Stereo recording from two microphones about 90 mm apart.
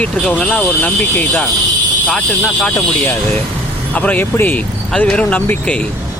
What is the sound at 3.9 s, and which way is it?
Speech, 15° left (ahead or behind).